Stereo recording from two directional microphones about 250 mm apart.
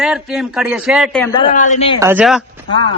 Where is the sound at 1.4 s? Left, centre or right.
Left.